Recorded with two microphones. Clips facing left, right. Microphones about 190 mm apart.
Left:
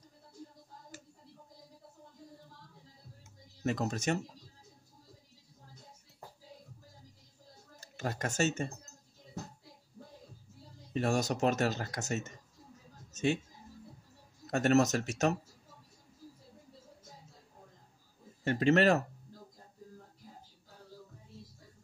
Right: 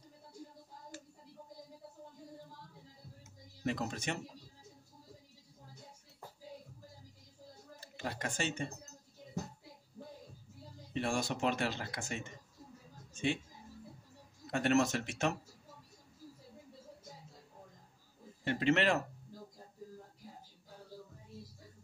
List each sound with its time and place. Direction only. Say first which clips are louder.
3.6 s speech: left 4 dB; 45° left (ahead or behind)
7.8 s speech: left 4 dB; 45° left (ahead or behind)
10.9 s speech: left 4 dB; 40° left (ahead or behind)
14.5 s speech: left 4 dB; 45° left (ahead or behind)
18.4 s speech: left 5 dB; 40° left (ahead or behind)